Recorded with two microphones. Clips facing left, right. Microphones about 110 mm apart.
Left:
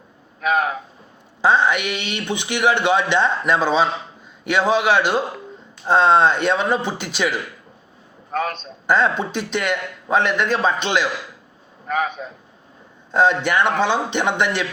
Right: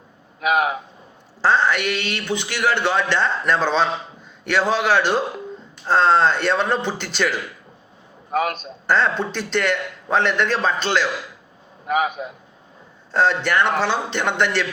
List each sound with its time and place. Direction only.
0.4 s a man's voice: 10° right (ahead or behind)
1.4 s a man's voice: 15° left (ahead or behind)
8.3 s a man's voice: 10° right (ahead or behind)
8.9 s a man's voice: 10° left (ahead or behind)
11.9 s a man's voice: 10° right (ahead or behind)
13.1 s a man's voice: 15° left (ahead or behind)